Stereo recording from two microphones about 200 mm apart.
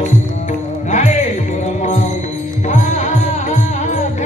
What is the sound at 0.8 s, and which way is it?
Music, 35° left (ahead or behind).